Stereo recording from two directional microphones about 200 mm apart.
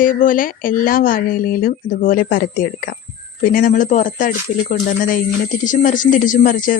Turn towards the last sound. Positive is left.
turn(degrees=40)  # may be behind; listen again after turning